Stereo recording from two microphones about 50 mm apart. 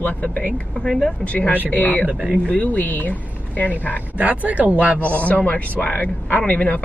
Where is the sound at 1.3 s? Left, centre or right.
Left.